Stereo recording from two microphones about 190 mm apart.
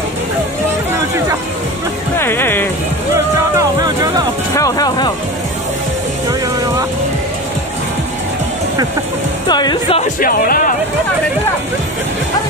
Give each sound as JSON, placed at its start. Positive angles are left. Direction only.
{"t": 2.1, "sound": "music", "side_deg": 10}
{"t": 3.5, "sound": "music", "side_deg": -20}
{"t": 4.6, "sound": "speech", "side_deg": 20}
{"t": 9.5, "sound": "speech", "side_deg": 20}
{"t": 10.2, "sound": "speech", "side_deg": 50}